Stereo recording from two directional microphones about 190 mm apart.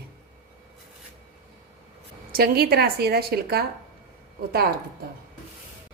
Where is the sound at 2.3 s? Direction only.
55° right (ahead or behind).